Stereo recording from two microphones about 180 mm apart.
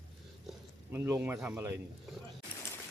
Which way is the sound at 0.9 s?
15° right (ahead or behind).